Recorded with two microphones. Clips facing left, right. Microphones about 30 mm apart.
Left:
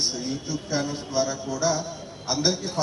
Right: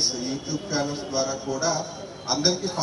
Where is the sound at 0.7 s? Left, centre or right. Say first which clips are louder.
Even; centre.